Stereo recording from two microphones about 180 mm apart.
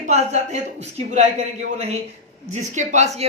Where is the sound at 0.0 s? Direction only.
40° right (ahead or behind).